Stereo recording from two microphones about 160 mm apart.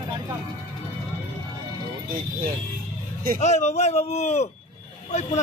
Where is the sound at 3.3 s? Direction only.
45° left (ahead or behind).